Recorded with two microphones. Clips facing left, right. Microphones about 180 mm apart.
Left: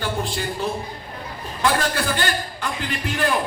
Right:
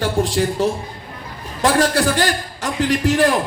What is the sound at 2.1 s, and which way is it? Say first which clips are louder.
A man's voice: right 4 dB; 85° right.